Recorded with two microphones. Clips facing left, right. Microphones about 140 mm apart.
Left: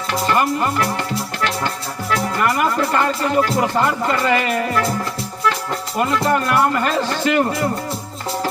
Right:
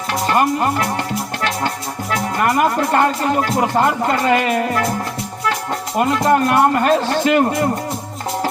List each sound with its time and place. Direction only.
0.1 s speech: 35° right (ahead or behind)
1.4 s music: 35° right (ahead or behind)
2.1 s speech: 35° right (ahead or behind)
6.0 s speech: 40° right (ahead or behind)